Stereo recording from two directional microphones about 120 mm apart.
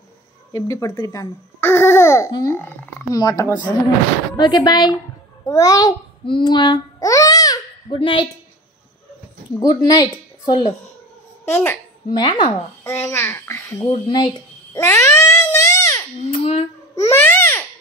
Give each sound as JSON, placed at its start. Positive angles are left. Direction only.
{"t": 0.5, "sound": "a child's voice", "side_deg": 25}
{"t": 3.1, "sound": "speech", "side_deg": 30}
{"t": 6.2, "sound": "babbling", "side_deg": 40}
{"t": 7.9, "sound": "speech", "side_deg": 45}
{"t": 9.6, "sound": "a child's voice", "side_deg": 35}
{"t": 11.4, "sound": "a child's voice", "side_deg": 20}
{"t": 12.1, "sound": "speech", "side_deg": 40}
{"t": 12.8, "sound": "a child's voice", "side_deg": 20}
{"t": 14.0, "sound": "speech", "side_deg": 40}
{"t": 14.7, "sound": "babbling", "side_deg": 25}
{"t": 16.3, "sound": "a sound", "side_deg": 60}
{"t": 17.0, "sound": "babbling", "side_deg": 20}